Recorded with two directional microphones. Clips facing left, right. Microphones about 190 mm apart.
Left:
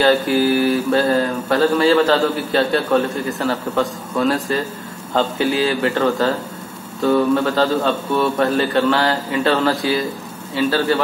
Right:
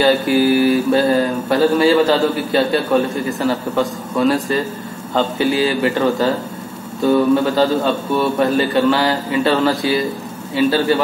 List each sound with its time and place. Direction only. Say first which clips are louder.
0.5 s speech: right 3 dB; 15° right (ahead or behind)
5.9 s speech: right 1 dB; 15° right (ahead or behind)
10.5 s speech: right 3 dB; 15° right (ahead or behind)